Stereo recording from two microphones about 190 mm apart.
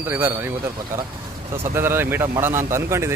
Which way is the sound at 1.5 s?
15° right (ahead or behind).